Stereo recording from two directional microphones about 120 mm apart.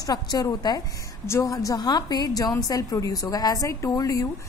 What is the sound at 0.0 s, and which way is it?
A woman's voice, 30° left (ahead or behind).